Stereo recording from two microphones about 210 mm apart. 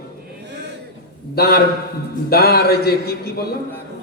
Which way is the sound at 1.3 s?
45° left (ahead or behind).